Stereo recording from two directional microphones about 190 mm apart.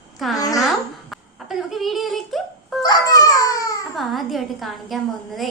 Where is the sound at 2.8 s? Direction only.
20° left (ahead or behind).